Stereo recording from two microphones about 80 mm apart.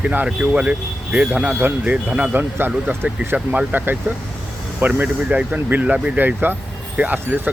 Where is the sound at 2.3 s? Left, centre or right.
Right.